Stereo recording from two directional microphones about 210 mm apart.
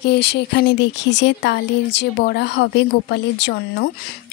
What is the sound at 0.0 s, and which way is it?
Speech, 55° left (ahead or behind).